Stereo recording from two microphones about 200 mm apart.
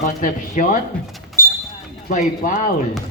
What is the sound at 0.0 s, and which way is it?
Speech, 45° left (ahead or behind).